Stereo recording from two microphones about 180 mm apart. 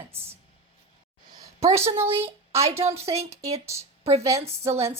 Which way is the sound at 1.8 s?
15° right (ahead or behind).